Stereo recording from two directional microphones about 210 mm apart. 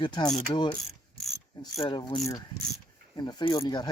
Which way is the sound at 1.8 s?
25° left (ahead or behind).